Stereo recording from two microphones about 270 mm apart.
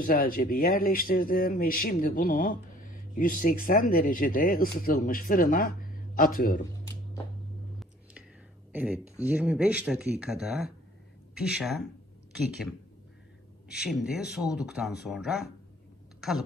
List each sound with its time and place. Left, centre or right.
0.0 s speech: left
8.7 s speech: centre
13.8 s speech: centre